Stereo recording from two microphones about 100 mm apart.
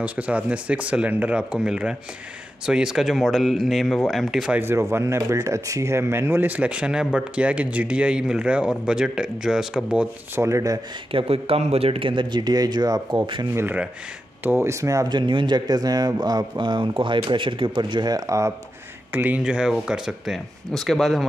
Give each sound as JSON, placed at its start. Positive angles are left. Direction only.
{"t": 0.0, "sound": "speech", "side_deg": -15}
{"t": 4.6, "sound": "speech", "side_deg": -30}
{"t": 10.3, "sound": "speech", "side_deg": -30}
{"t": 11.1, "sound": "speech", "side_deg": -70}
{"t": 14.4, "sound": "speech", "side_deg": -25}
{"t": 15.1, "sound": "a man's voice", "side_deg": -50}
{"t": 19.1, "sound": "speech", "side_deg": -15}